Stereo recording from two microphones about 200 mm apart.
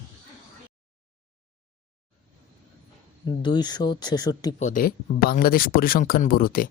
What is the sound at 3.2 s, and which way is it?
A man's voice, 20° left (ahead or behind).